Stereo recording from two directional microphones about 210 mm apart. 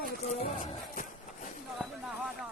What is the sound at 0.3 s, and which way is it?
Music, 30° left (ahead or behind).